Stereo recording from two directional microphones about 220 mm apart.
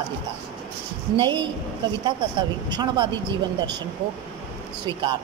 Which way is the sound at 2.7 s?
20° right (ahead or behind).